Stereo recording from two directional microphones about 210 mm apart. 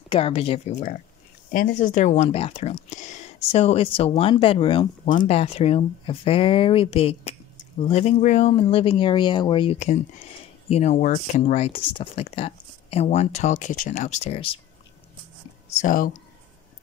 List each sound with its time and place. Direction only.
0.1 s speech: 25° left (ahead or behind)
15.8 s speech: 40° left (ahead or behind)